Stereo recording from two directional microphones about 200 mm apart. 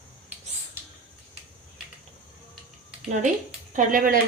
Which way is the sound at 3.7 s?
40° right (ahead or behind).